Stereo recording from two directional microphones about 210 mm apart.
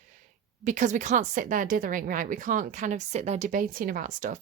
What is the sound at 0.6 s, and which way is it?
Speech, 35° right (ahead or behind).